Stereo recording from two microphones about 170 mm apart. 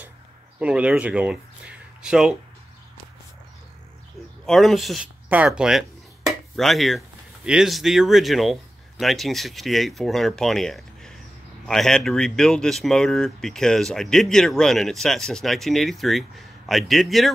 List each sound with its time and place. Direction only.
0.6 s speech: 5° right (ahead or behind)
4.5 s speech: centre (ahead or behind)